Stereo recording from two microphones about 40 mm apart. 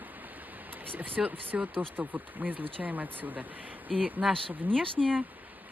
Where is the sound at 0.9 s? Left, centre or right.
Right.